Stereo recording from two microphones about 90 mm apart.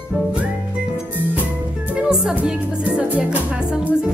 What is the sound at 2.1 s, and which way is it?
Music, 10° right (ahead or behind).